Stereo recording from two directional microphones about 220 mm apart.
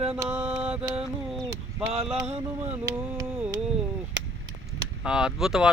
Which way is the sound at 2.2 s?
30° right (ahead or behind).